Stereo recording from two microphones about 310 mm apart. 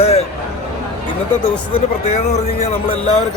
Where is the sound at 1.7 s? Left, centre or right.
Left.